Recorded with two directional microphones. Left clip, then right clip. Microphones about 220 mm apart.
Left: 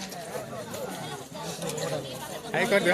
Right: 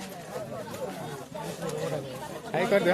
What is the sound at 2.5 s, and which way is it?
Speech, centre (ahead or behind).